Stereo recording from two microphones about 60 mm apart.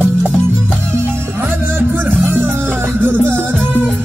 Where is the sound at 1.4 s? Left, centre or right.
Right.